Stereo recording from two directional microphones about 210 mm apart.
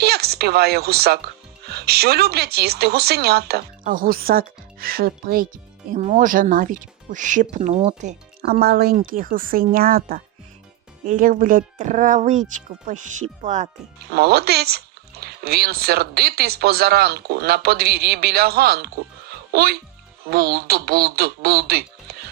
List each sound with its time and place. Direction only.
0.0 s speech: 50° right (ahead or behind)
14.1 s speech: 50° right (ahead or behind)